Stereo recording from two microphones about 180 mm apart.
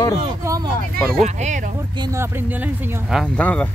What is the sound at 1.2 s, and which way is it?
Speech, 40° right (ahead or behind).